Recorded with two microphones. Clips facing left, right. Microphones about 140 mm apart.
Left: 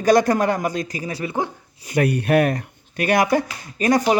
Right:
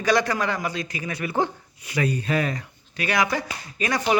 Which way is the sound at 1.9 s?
65° left (ahead or behind).